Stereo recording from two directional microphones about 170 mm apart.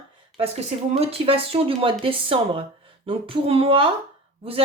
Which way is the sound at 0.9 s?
35° right (ahead or behind).